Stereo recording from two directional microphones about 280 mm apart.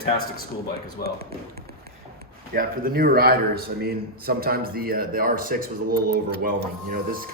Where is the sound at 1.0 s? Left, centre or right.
Right.